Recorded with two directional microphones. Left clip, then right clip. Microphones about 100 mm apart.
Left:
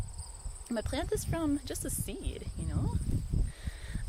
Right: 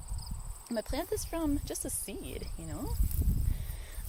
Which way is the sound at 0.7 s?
35° left (ahead or behind).